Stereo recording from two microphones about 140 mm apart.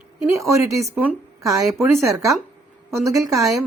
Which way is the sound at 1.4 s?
25° right (ahead or behind).